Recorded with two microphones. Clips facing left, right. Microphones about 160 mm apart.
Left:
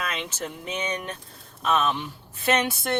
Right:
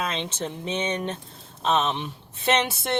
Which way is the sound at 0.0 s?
25° right (ahead or behind).